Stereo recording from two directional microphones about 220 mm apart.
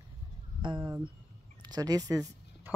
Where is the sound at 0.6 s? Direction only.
20° right (ahead or behind).